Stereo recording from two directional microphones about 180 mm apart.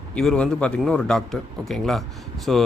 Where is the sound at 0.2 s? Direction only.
5° left (ahead or behind).